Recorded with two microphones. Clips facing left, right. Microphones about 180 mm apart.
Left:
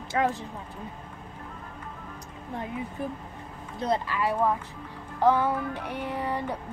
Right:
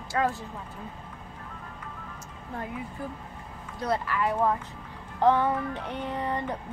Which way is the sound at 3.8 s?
20° left (ahead or behind).